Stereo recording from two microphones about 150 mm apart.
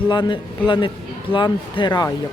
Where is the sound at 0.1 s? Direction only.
30° left (ahead or behind).